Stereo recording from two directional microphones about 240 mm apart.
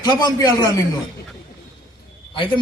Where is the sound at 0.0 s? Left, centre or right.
Centre.